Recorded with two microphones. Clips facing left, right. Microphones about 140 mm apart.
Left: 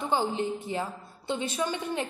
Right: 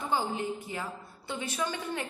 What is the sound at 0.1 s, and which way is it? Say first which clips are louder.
A woman's voice: left 3 dB; 25° left (ahead or behind).